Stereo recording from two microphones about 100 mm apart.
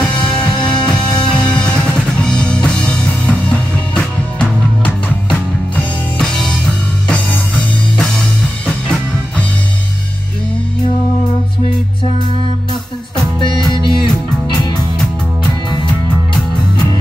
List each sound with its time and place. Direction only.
1.5 s music: 10° left (ahead or behind)
6.1 s music: 5° left (ahead or behind)
13.7 s music: 50° left (ahead or behind)